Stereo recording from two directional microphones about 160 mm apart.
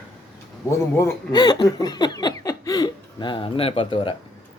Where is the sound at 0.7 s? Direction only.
20° left (ahead or behind).